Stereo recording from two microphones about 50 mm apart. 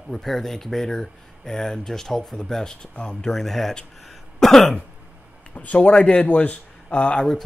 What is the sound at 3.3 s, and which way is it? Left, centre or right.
Speech, centre.